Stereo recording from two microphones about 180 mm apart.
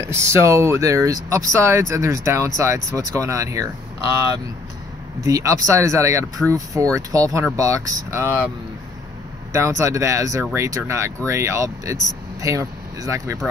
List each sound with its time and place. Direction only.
0.0 s speech: 15° right (ahead or behind)
5.2 s speech: 15° right (ahead or behind)
9.5 s speech: 15° right (ahead or behind)